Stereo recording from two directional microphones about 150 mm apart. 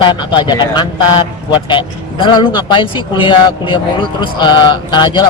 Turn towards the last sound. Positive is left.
turn(degrees=30)  # may be behind; listen again after turning